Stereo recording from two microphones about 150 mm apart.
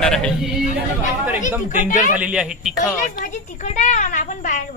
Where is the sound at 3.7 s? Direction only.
55° left (ahead or behind).